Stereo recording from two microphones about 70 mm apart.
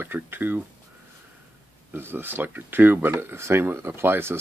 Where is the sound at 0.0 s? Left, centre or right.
Right.